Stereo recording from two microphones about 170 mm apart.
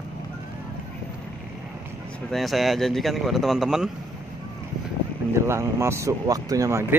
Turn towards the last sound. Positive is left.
turn(degrees=-20)  # may be behind; listen again after turning